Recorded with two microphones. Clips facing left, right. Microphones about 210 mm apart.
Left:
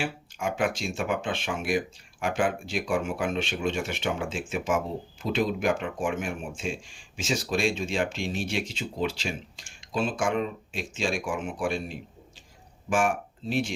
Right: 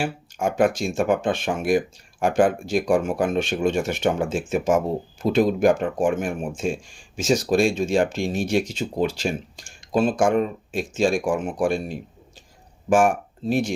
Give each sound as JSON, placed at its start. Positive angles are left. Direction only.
{"t": 0.0, "sound": "speech", "side_deg": -45}